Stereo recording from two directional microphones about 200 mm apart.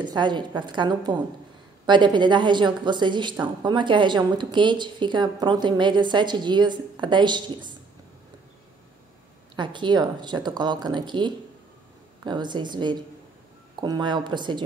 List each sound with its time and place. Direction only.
0.0 s a woman's voice: 20° right (ahead or behind)
9.6 s a woman's voice: 25° right (ahead or behind)